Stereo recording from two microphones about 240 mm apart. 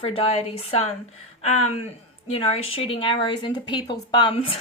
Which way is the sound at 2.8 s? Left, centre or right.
Left.